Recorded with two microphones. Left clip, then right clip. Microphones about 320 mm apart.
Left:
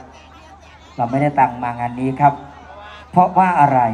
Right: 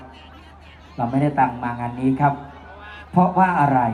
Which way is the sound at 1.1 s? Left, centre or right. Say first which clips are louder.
Left 4 dB; left.